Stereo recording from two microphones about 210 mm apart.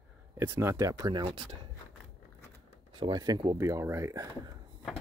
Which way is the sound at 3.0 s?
20° right (ahead or behind).